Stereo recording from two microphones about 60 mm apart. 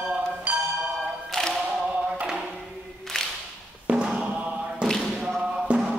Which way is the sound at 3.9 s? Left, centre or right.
Right.